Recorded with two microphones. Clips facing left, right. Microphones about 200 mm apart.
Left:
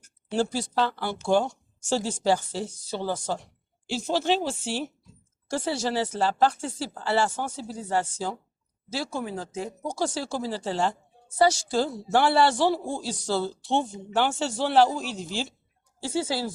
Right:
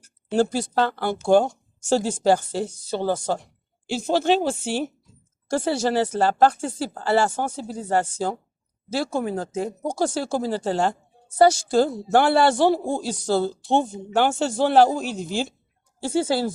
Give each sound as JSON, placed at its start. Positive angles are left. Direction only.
{"t": 0.3, "sound": "a woman's voice", "side_deg": -55}